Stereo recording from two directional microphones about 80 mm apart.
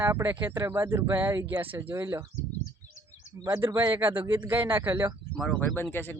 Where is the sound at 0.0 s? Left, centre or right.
Right.